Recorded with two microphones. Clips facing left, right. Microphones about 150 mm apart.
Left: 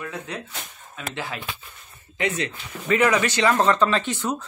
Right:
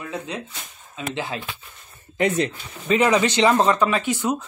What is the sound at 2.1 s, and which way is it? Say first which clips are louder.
Speech: right 5 dB; 40° right (ahead or behind).